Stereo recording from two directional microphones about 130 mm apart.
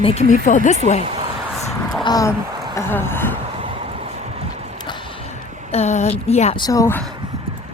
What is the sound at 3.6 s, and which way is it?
Boat, 45° right (ahead or behind).